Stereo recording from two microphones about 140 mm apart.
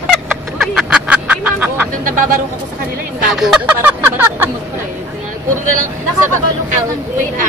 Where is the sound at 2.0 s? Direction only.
75° right (ahead or behind).